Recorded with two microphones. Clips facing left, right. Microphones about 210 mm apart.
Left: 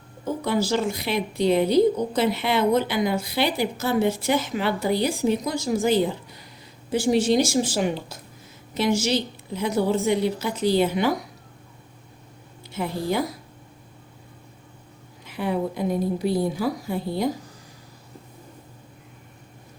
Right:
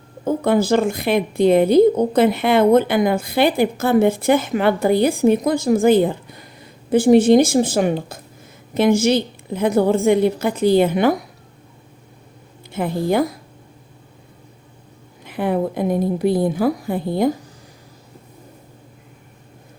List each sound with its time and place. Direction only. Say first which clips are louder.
0.3 s a woman's voice: right 7 dB; 55° right (ahead or behind)
12.7 s a woman's voice: right 6 dB; 55° right (ahead or behind)
15.2 s a woman's voice: right 5 dB; 55° right (ahead or behind)